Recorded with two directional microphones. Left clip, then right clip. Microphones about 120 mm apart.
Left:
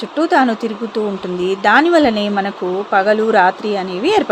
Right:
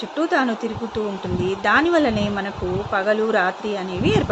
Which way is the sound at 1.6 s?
50° left (ahead or behind).